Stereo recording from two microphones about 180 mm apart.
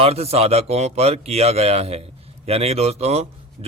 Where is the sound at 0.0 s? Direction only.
35° right (ahead or behind).